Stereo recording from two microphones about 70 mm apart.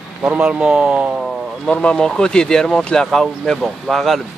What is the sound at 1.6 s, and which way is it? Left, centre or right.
Speech, centre.